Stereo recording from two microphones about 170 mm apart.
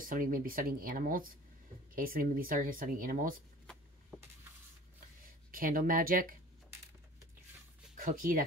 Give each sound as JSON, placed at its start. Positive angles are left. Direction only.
{"t": 0.0, "sound": "speech", "side_deg": -55}
{"t": 5.5, "sound": "speech", "side_deg": -55}
{"t": 7.9, "sound": "speech", "side_deg": -50}